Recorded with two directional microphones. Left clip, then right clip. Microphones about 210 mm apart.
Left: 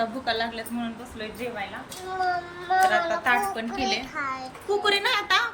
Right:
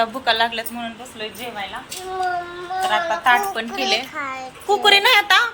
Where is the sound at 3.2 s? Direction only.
5° left (ahead or behind).